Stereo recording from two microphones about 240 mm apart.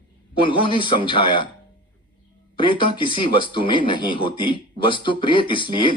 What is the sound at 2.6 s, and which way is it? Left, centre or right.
Speech, centre.